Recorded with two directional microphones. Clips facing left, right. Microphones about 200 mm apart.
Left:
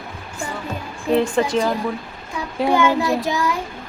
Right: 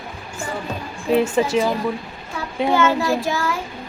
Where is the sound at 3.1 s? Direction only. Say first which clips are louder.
Left 1 dB; 15° left (ahead or behind).